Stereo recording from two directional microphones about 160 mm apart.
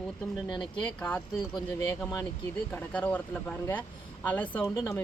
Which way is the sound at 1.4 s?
20° left (ahead or behind).